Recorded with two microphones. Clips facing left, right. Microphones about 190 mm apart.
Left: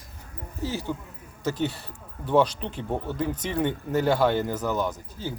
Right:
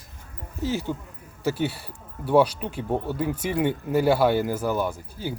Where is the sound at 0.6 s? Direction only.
15° right (ahead or behind).